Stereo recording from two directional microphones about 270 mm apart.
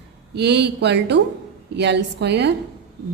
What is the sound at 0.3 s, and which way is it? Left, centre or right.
A woman's voice, right.